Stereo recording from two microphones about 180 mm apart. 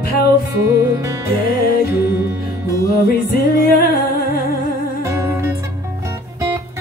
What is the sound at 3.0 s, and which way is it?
Music, 55° left (ahead or behind).